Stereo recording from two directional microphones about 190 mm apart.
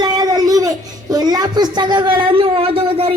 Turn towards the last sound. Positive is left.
turn(degrees=-30)  # may be behind; listen again after turning